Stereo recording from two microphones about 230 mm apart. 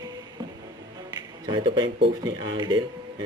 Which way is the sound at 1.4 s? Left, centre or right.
Right.